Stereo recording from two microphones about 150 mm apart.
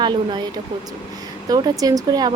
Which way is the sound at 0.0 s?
30° right (ahead or behind).